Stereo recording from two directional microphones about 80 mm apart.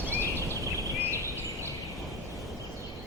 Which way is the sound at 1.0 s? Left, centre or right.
Right.